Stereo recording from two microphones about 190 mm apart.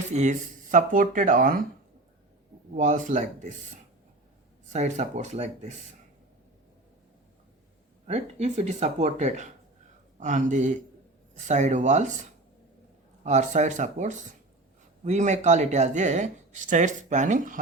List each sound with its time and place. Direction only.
0.1 s speech: 40° right (ahead or behind)
2.7 s speech: 40° right (ahead or behind)
4.7 s speech: 40° right (ahead or behind)
8.0 s speech: 35° right (ahead or behind)
13.2 s speech: 40° right (ahead or behind)